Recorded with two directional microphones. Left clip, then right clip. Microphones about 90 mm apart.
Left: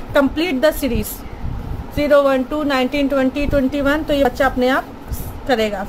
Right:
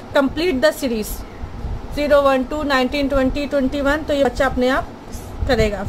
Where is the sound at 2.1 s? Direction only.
15° right (ahead or behind).